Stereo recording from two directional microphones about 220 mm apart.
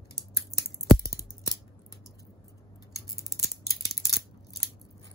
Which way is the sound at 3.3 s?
15° left (ahead or behind).